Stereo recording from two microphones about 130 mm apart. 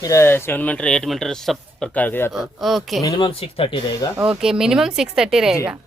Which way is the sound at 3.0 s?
30° left (ahead or behind).